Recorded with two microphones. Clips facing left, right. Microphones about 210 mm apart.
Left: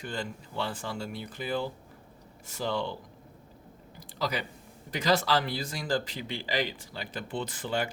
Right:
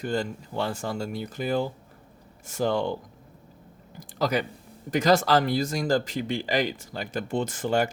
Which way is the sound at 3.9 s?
50° right (ahead or behind).